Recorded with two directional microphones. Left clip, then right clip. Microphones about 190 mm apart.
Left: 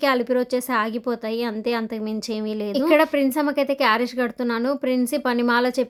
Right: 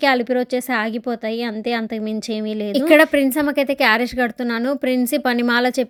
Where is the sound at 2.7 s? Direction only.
20° right (ahead or behind).